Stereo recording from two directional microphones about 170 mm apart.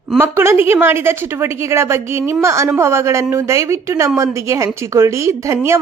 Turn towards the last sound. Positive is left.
turn(degrees=-15)  # may be behind; listen again after turning